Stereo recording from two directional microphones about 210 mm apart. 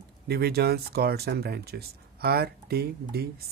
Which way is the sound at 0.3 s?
50° right (ahead or behind).